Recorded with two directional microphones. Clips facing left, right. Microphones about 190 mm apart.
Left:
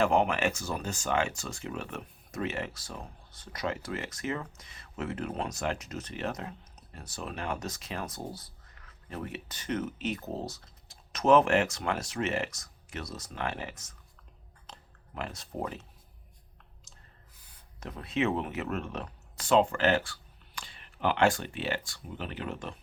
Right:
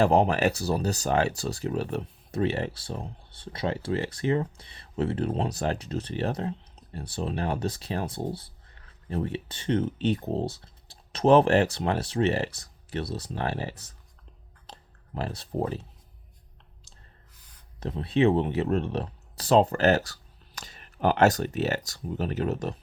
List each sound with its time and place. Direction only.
0.0 s speech: 35° right (ahead or behind)
17.7 s speech: 30° right (ahead or behind)